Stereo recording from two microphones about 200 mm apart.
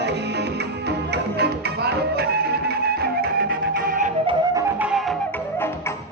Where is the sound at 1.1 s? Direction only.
55° right (ahead or behind).